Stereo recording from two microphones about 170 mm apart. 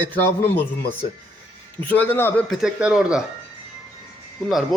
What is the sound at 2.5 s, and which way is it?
Speech, 5° right (ahead or behind).